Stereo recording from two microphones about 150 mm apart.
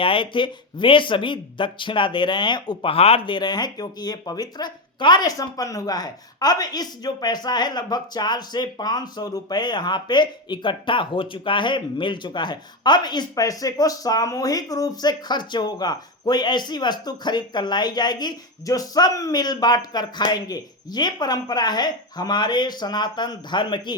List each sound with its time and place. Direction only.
0.0 s speech: 35° left (ahead or behind)